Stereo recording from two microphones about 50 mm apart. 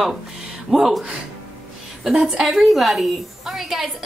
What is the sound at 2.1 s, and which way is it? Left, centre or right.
A woman's voice, centre.